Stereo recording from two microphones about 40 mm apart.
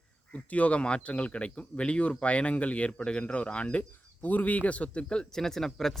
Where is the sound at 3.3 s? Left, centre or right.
Left.